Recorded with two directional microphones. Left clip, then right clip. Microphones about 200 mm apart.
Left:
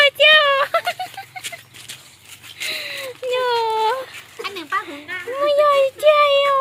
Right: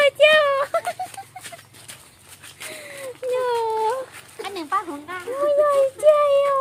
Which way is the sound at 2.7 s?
10° right (ahead or behind).